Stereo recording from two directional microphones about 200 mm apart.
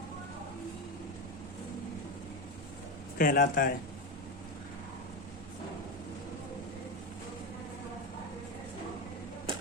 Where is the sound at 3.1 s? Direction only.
45° left (ahead or behind).